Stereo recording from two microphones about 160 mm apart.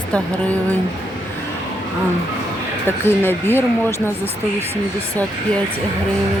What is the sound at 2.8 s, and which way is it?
Speech, 15° left (ahead or behind).